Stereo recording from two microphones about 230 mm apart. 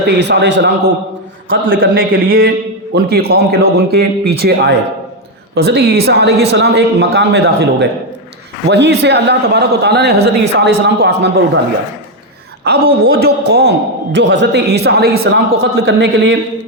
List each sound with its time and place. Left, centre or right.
0.2 s a man's voice: right
1.7 s a man's voice: right
12.6 s a man's voice: right